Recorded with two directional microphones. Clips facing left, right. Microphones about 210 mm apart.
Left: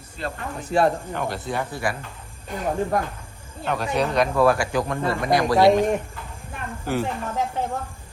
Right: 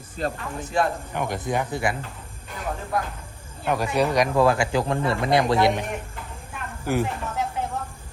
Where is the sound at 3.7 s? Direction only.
10° right (ahead or behind); by 4.9 s 25° right (ahead or behind).